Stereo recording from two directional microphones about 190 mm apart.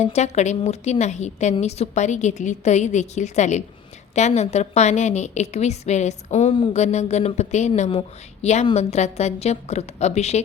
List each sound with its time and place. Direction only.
0.0 s a woman's voice: 35° left (ahead or behind)